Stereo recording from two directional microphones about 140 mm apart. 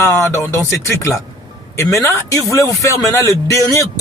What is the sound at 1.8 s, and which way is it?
Speech, 20° left (ahead or behind).